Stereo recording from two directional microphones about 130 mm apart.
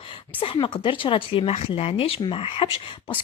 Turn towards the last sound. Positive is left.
turn(degrees=40)  # may be behind; listen again after turning